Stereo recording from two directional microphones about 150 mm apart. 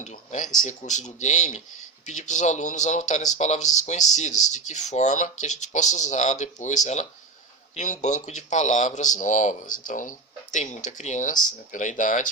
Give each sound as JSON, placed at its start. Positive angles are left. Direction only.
{"t": 0.0, "sound": "speech", "side_deg": 50}